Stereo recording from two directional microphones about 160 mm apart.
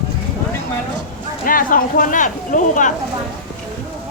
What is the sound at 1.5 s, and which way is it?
Speech, 60° left (ahead or behind).